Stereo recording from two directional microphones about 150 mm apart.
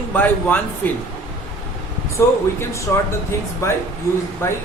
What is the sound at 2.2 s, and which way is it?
Speech, 15° left (ahead or behind).